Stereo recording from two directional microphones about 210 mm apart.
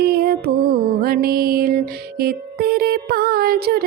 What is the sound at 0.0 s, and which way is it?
Music, 50° right (ahead or behind).